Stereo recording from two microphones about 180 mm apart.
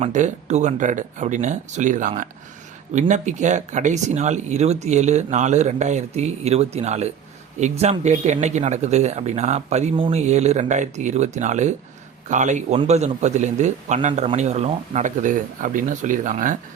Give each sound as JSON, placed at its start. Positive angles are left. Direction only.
{"t": 0.0, "sound": "a man's voice", "side_deg": -40}